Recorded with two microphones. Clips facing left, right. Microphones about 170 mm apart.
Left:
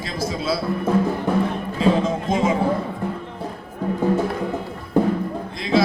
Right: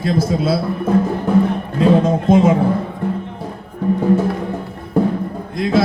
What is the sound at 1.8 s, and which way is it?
Speech, 55° right (ahead or behind).